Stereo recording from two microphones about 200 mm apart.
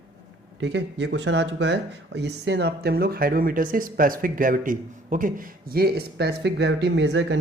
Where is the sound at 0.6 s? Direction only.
60° right (ahead or behind).